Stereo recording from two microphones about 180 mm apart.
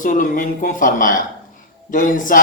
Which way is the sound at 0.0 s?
50° left (ahead or behind).